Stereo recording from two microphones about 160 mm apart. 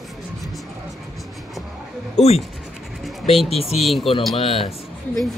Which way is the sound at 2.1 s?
40° left (ahead or behind).